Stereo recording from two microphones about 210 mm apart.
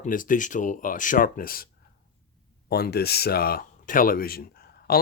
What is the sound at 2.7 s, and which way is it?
Speech, 50° left (ahead or behind).